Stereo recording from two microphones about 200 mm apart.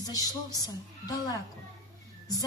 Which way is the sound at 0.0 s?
15° left (ahead or behind).